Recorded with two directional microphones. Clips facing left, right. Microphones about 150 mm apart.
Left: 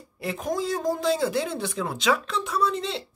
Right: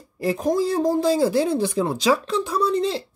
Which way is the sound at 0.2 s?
35° right (ahead or behind).